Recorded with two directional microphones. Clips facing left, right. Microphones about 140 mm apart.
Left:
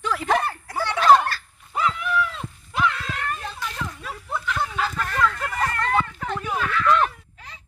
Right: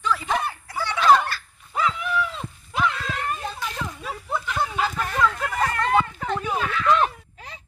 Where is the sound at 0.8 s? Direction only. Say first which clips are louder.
Left 1 dB; 35° left (ahead or behind).